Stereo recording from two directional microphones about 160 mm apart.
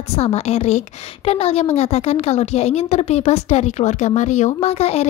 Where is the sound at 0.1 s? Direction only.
40° left (ahead or behind).